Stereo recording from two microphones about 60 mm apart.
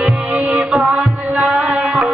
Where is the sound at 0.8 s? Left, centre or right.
Centre.